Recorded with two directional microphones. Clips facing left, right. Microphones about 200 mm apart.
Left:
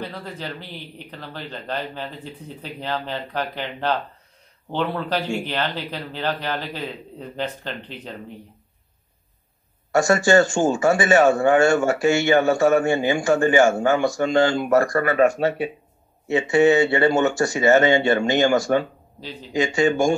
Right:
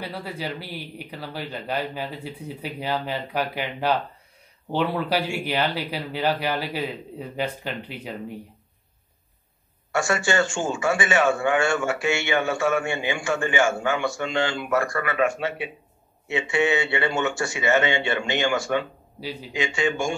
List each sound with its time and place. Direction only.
0.0 s speech: 10° right (ahead or behind)
9.9 s a man's voice: 40° left (ahead or behind)
19.1 s speech: 10° right (ahead or behind)
19.5 s a man's voice: 40° left (ahead or behind)